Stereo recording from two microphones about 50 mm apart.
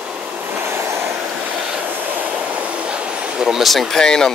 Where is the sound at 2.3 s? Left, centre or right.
Right.